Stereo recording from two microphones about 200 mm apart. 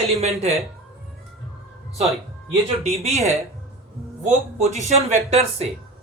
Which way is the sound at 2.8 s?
30° right (ahead or behind).